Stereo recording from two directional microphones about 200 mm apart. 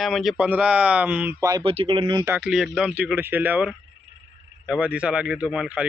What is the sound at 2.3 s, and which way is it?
Speech, 5° right (ahead or behind).